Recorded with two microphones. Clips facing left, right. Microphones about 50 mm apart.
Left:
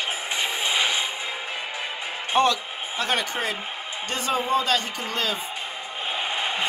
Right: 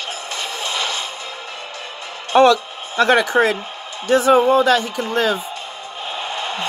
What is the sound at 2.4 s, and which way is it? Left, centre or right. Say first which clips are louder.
Speech: right 9 dB; right.